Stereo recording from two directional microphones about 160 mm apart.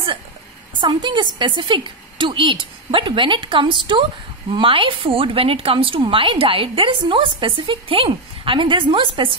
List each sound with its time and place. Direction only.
0.7 s a woman's voice: 30° right (ahead or behind)